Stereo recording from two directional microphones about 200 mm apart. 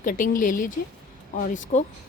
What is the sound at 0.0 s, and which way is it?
A woman's voice, 40° left (ahead or behind).